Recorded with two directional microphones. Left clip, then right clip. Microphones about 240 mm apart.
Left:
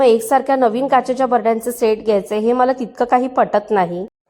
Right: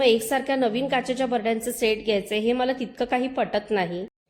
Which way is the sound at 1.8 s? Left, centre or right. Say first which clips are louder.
Left 8 dB; left.